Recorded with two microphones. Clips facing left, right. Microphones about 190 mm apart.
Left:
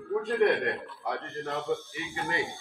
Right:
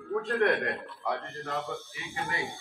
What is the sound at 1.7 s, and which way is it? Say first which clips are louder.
Speech: left 6 dB; 15° left (ahead or behind).